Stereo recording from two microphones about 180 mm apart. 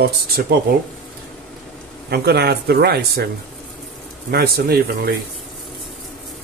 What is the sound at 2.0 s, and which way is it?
Speech, 65° right (ahead or behind).